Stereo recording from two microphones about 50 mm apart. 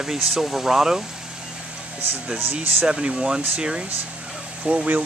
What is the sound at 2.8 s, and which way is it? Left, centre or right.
Speech, centre.